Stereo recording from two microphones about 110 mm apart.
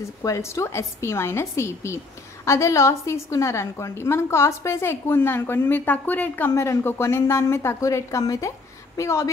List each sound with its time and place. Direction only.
0.2 s a woman's voice: 30° left (ahead or behind)